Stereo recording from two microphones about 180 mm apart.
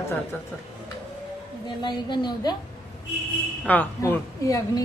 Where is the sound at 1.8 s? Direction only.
25° left (ahead or behind).